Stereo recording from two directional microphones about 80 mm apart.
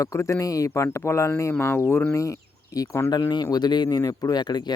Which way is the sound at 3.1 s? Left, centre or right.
Left.